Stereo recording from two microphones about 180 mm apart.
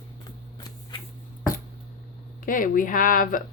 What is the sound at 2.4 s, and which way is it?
Speech, 50° left (ahead or behind).